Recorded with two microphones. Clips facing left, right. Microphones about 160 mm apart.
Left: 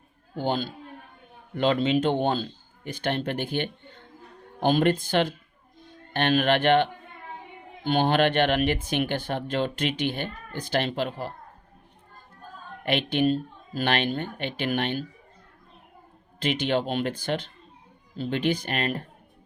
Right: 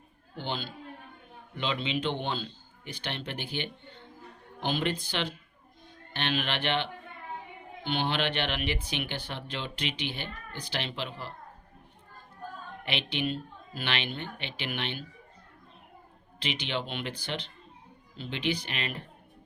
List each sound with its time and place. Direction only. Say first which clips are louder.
0.3 s speech: left 8 dB; 45° left (ahead or behind)
12.8 s speech: left 9 dB; 50° left (ahead or behind)
16.4 s speech: left 8 dB; 50° left (ahead or behind)